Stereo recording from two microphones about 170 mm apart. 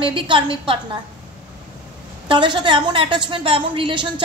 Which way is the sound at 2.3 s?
30° right (ahead or behind).